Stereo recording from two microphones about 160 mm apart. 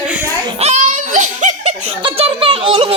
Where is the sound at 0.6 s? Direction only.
45° right (ahead or behind).